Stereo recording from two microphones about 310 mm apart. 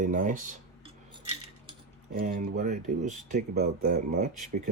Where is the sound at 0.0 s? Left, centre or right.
Right.